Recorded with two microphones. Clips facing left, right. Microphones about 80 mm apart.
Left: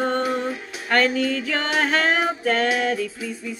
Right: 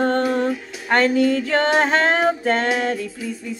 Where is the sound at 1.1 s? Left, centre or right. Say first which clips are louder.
Right 6 dB; right.